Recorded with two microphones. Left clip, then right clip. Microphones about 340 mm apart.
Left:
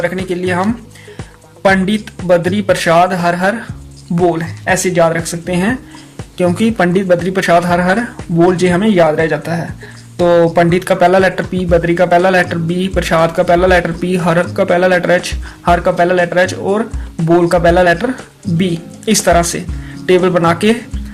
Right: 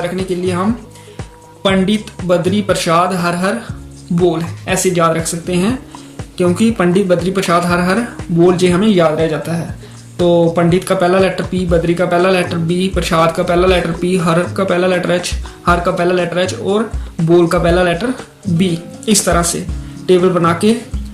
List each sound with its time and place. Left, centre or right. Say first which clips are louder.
0.0 s speech: left 1 dB; left
1.6 s speech: left 3 dB; left
17.2 s speech: left 1 dB; centre
17.5 s speech: left 3 dB; left